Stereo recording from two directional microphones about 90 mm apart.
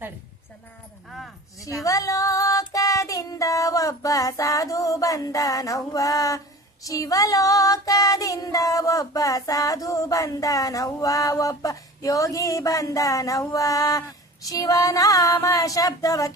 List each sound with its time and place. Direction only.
1.5 s child singing: 40° left (ahead or behind)